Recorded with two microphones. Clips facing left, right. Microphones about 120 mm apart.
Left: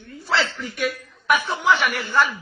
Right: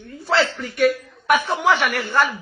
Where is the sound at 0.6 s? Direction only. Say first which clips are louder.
Right 8 dB; 50° right (ahead or behind).